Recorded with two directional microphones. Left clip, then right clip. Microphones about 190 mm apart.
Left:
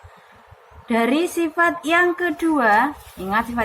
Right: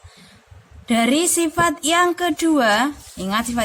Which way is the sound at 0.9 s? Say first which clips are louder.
Right 1 dB; 70° right (ahead or behind).